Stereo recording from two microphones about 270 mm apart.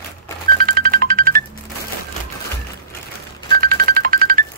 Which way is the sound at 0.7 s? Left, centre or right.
Right.